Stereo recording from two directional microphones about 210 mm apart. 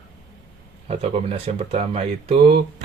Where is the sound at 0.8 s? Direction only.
30° right (ahead or behind).